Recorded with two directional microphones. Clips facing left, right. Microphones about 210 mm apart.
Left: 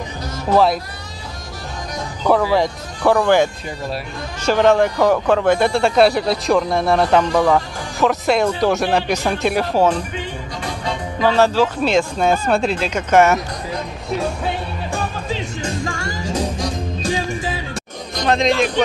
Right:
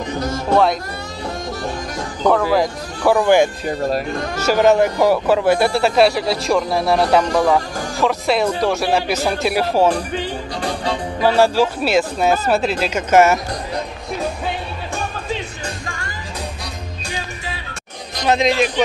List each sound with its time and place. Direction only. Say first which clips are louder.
2.3 s speech: left 3 dB; centre (ahead or behind)
3.2 s speech: right 1 dB; 15° right (ahead or behind)
11.1 s speech: even; 10° right (ahead or behind)
18.2 s speech: even; 5° right (ahead or behind)